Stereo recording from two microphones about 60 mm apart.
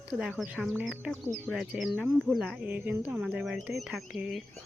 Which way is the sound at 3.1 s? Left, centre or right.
Centre.